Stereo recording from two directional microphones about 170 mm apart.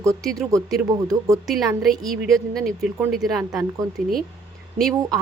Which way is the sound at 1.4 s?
Centre (ahead or behind).